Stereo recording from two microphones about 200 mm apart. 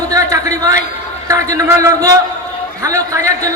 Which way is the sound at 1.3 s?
15° right (ahead or behind).